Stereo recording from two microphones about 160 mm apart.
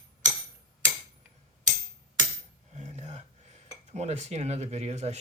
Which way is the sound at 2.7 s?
45° right (ahead or behind).